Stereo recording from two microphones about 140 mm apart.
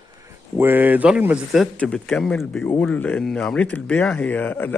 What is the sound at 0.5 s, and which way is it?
Speech, 15° right (ahead or behind).